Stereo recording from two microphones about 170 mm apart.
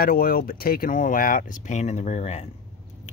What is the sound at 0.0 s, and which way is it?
Speech, 60° left (ahead or behind).